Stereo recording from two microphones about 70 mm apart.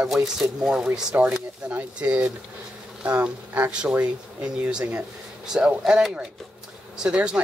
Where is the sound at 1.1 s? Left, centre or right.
Right.